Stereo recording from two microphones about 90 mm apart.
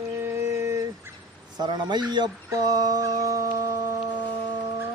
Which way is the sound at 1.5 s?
55° right (ahead or behind).